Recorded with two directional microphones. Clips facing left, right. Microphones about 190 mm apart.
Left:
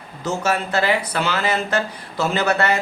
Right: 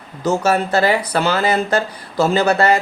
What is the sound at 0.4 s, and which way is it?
Speech, 40° right (ahead or behind).